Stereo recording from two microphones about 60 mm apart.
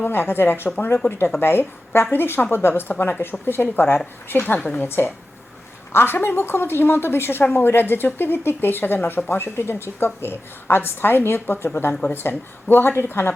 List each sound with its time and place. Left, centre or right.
0.0 s speech: left
4.9 s speech: left